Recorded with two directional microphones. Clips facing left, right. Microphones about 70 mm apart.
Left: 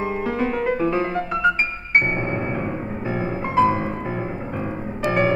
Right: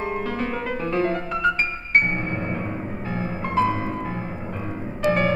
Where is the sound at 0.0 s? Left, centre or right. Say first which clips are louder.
Left 3 dB; centre.